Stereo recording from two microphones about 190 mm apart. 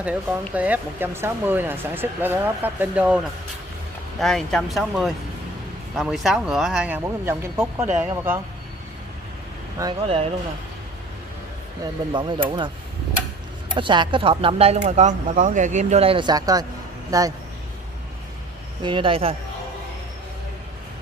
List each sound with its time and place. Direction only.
0.0 s speech: 5° right (ahead or behind)
4.2 s speech: centre (ahead or behind)
9.8 s speech: 15° right (ahead or behind)
12.1 s speech: 25° right (ahead or behind)
13.7 s speech: 25° right (ahead or behind)
18.8 s speech: 25° right (ahead or behind)